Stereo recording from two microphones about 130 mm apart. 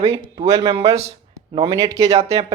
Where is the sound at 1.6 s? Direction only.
25° right (ahead or behind).